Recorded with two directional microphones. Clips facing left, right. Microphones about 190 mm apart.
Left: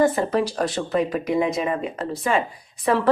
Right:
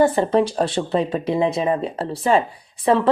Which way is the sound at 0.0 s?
30° right (ahead or behind).